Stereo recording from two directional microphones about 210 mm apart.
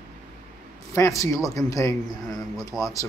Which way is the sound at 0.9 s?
15° left (ahead or behind).